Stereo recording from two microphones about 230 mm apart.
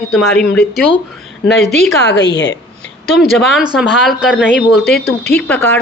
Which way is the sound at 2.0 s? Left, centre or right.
Left.